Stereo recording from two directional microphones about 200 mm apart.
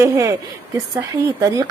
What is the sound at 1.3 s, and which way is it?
Speech, 20° right (ahead or behind).